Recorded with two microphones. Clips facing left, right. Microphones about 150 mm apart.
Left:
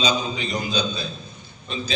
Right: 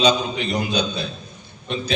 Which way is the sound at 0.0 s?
65° right (ahead or behind).